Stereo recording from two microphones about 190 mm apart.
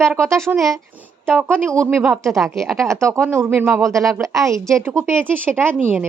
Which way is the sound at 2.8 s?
15° right (ahead or behind).